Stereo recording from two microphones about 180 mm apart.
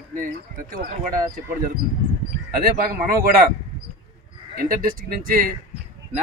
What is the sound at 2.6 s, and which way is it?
Speech, 50° right (ahead or behind).